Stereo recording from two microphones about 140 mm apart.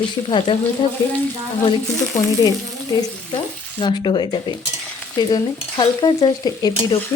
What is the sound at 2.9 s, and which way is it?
Speech, 35° left (ahead or behind).